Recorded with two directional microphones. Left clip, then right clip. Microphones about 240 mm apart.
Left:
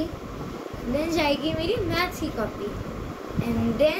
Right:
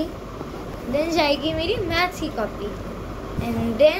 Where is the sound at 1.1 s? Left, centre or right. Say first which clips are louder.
Right 3 dB; centre.